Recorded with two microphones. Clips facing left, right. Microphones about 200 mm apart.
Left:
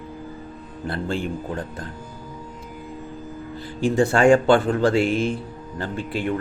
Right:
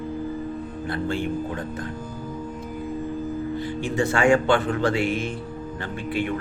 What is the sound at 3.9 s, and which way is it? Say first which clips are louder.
Speech: left 4 dB; 35° left (ahead or behind).